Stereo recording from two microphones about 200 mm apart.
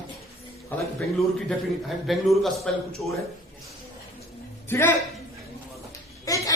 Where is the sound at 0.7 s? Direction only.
10° left (ahead or behind).